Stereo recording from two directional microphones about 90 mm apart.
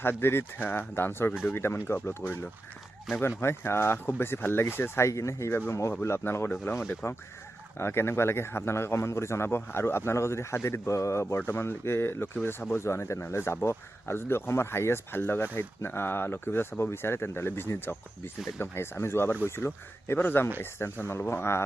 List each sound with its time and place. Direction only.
0.0 s a man's voice: 25° left (ahead or behind)
3.2 s a man's voice: 25° left (ahead or behind)